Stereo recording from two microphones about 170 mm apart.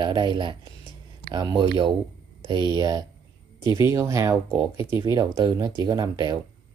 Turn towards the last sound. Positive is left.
turn(degrees=-25)  # may be behind; listen again after turning